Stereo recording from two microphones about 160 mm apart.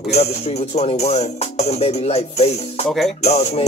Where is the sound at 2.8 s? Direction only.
Centre (ahead or behind).